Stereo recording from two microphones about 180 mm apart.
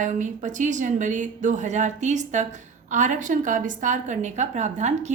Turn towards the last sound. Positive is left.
turn(degrees=-40)  # may be behind; listen again after turning